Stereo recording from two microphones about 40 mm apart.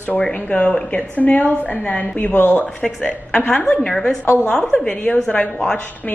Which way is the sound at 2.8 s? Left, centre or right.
Left.